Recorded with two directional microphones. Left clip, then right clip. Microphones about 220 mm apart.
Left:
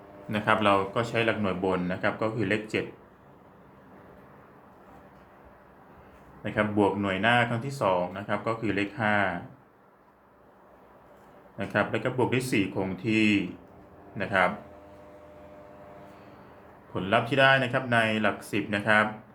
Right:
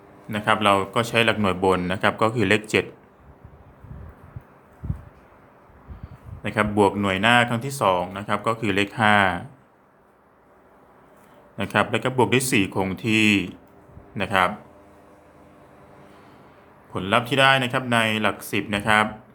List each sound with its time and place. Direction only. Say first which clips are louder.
0.3 s speech: right 4 dB; 15° right (ahead or behind); by 2.8 s 40° right (ahead or behind)
6.4 s speech: right 5 dB; 35° right (ahead or behind)
11.5 s speech: right 5 dB; 35° right (ahead or behind)
16.9 s speech: right 4 dB; 25° right (ahead or behind)